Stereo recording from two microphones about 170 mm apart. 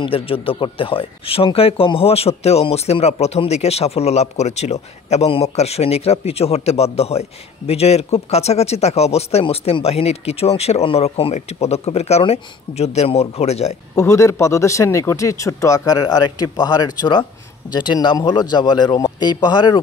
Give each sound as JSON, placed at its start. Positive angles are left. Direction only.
{"t": 0.0, "sound": "speech", "side_deg": 35}
{"t": 13.9, "sound": "speech", "side_deg": 15}